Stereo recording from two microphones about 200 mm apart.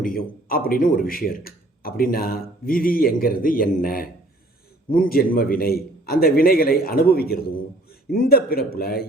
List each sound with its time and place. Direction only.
0.0 s a man's voice: 45° left (ahead or behind)